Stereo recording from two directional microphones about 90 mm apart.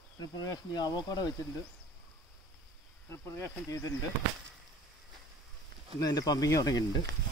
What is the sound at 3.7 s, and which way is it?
Speech, 40° left (ahead or behind).